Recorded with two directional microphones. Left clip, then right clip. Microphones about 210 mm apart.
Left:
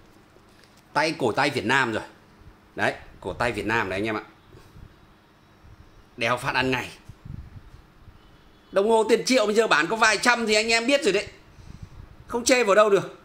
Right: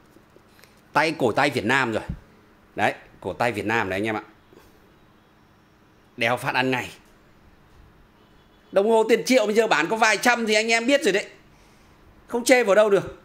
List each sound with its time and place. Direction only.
0.9 s speech: 25° right (ahead or behind)
6.1 s speech: 15° right (ahead or behind)
8.7 s speech: 15° right (ahead or behind)
12.3 s speech: 15° right (ahead or behind)